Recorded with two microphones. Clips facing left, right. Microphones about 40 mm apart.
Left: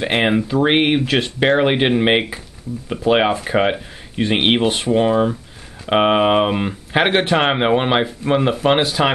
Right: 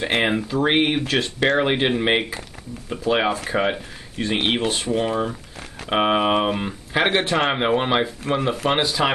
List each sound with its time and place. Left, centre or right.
0.0 s speech: centre
0.7 s speech: left